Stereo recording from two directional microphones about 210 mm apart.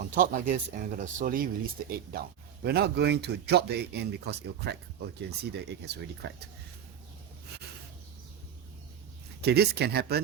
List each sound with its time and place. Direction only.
0.1 s speech: 40° right (ahead or behind)
9.4 s speech: 50° right (ahead or behind)